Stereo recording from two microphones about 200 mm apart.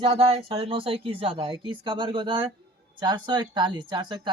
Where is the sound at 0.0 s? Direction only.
30° right (ahead or behind).